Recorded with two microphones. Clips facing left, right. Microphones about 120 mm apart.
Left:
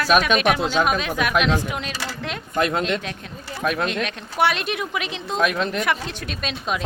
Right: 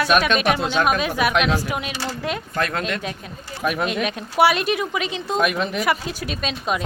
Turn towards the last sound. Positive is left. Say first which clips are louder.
# right 2 dB
turn(degrees=0)  # may be behind; listen again after turning